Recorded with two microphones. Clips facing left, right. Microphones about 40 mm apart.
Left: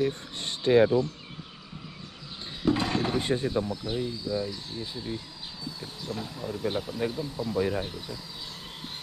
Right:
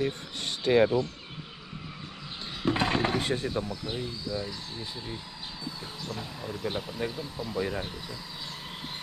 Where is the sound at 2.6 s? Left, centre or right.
Right.